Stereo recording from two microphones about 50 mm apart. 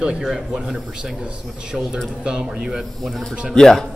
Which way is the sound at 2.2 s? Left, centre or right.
Centre.